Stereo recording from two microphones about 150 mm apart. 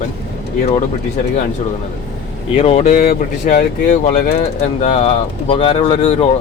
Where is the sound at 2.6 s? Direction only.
45° left (ahead or behind).